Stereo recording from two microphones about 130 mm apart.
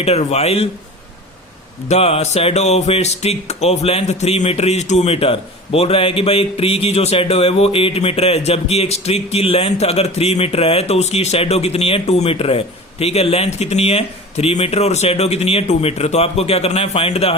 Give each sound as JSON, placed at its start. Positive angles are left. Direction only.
{"t": 0.0, "sound": "speech", "side_deg": 55}
{"t": 1.9, "sound": "speech", "side_deg": 50}